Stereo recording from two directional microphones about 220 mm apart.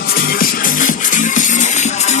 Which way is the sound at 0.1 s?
40° left (ahead or behind).